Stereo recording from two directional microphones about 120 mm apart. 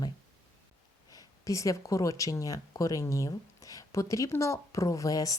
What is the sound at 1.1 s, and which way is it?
Speech, 25° left (ahead or behind).